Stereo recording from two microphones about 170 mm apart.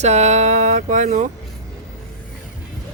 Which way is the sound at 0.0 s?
40° right (ahead or behind).